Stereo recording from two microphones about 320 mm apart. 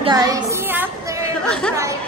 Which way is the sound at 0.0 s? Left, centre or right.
Centre.